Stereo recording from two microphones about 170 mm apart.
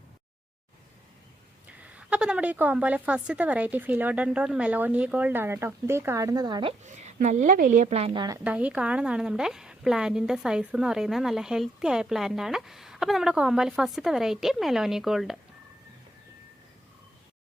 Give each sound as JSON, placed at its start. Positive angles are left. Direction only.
{"t": 1.6, "sound": "a woman's voice", "side_deg": -10}
{"t": 6.8, "sound": "speech", "side_deg": -45}
{"t": 8.4, "sound": "a woman's voice", "side_deg": -10}